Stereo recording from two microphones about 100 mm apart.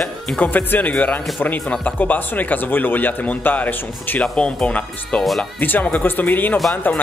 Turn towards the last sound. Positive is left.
turn(degrees=20)  # may be behind; listen again after turning